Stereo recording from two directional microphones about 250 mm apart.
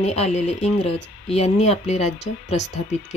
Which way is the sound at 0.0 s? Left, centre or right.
Left.